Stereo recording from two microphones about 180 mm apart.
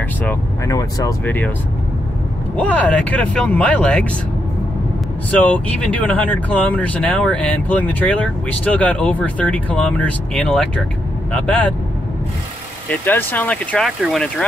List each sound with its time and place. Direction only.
0.2 s vehicle: 10° left (ahead or behind)
0.7 s speech: 20° left (ahead or behind)
1.2 s speech: 10° left (ahead or behind)
2.5 s speech: 10° left (ahead or behind)
5.3 s speech: 10° left (ahead or behind)
12.9 s speech: 10° left (ahead or behind)